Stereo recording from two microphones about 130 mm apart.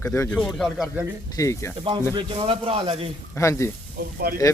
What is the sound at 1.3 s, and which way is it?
Speech, 25° left (ahead or behind).